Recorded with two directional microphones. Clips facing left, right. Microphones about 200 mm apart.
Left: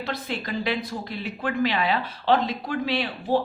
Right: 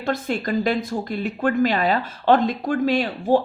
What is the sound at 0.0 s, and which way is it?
Speech, 50° right (ahead or behind).